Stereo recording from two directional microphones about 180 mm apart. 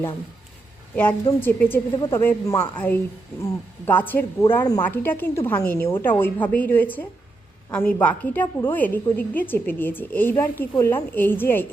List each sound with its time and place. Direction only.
0.9 s a woman's voice: 10° left (ahead or behind)